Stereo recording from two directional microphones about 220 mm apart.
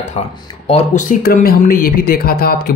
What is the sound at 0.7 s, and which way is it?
Speech, 35° left (ahead or behind).